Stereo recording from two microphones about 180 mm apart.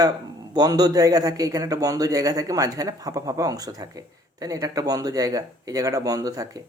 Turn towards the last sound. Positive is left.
turn(degrees=-20)  # may be behind; listen again after turning